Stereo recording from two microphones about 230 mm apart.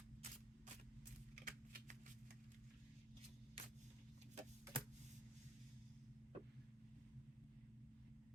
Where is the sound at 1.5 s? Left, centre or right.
Right.